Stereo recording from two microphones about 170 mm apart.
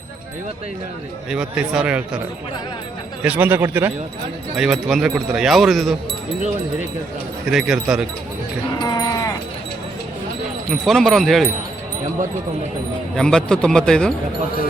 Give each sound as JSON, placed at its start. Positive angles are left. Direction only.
{"t": 1.3, "sound": "speech", "side_deg": -5}
{"t": 3.2, "sound": "speech", "side_deg": -10}
{"t": 4.5, "sound": "speech", "side_deg": 0}
{"t": 7.5, "sound": "speech", "side_deg": -5}
{"t": 8.8, "sound": "sheep", "side_deg": 25}
{"t": 10.7, "sound": "speech", "side_deg": 0}
{"t": 13.1, "sound": "speech", "side_deg": 5}